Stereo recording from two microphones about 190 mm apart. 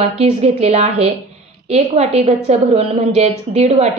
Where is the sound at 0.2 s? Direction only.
35° right (ahead or behind).